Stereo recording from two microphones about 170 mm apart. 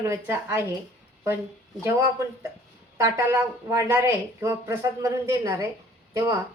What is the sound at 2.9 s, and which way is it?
Speech, 15° right (ahead or behind).